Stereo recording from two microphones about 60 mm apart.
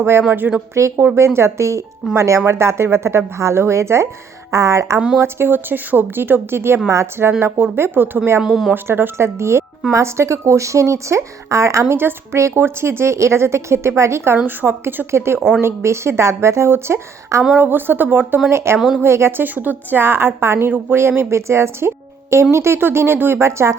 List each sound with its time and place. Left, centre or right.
0.0 s speech: right
0.7 s a woman's voice: right
5.2 s a woman's voice: right
7.6 s speech: right
8.4 s speech: centre
8.7 s a woman's voice: right
11.9 s a woman's voice: right
14.4 s a woman's voice: right
17.5 s speech: right
18.5 s a woman's voice: right
19.5 s a woman's voice: right